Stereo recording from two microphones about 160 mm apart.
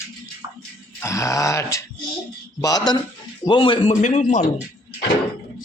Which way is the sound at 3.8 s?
45° left (ahead or behind).